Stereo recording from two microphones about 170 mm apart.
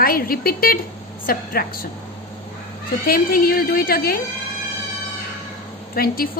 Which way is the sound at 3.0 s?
60° left (ahead or behind).